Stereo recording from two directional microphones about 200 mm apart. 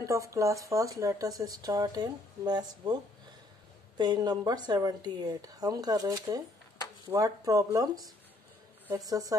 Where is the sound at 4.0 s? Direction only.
20° right (ahead or behind).